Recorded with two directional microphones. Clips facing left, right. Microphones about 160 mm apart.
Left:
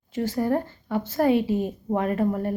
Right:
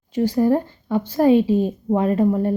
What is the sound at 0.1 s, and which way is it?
A woman's voice, 15° right (ahead or behind).